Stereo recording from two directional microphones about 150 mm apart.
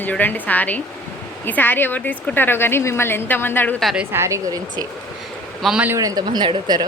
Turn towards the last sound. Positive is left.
turn(degrees=-30)  # may be behind; listen again after turning